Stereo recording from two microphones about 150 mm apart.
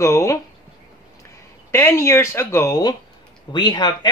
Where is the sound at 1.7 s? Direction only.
15° left (ahead or behind).